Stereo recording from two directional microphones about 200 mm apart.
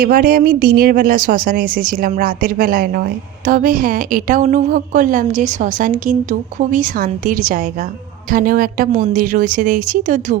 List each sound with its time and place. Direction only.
0.0 s a woman's voice: 45° right (ahead or behind)